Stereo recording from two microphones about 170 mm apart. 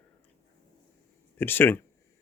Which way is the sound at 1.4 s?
10° left (ahead or behind).